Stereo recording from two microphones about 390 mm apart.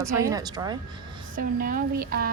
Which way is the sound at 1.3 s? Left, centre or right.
Right.